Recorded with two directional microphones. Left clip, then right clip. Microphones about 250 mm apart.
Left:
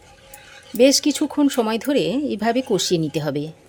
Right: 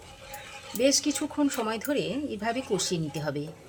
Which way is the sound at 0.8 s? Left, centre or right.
Left.